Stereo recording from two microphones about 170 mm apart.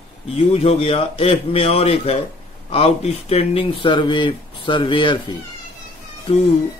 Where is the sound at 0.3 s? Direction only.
35° left (ahead or behind).